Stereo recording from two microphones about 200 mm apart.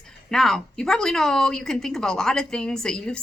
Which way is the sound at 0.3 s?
Centre (ahead or behind).